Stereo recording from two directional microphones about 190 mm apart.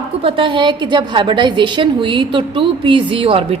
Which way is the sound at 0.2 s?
30° right (ahead or behind).